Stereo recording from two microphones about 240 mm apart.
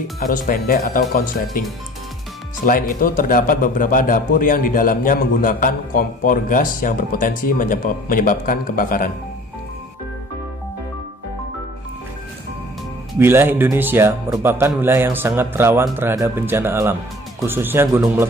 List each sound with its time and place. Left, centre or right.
0.3 s a man's voice: left
2.6 s a man's voice: left
13.1 s speech: centre